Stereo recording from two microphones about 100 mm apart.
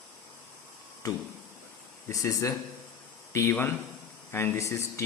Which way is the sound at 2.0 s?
30° left (ahead or behind).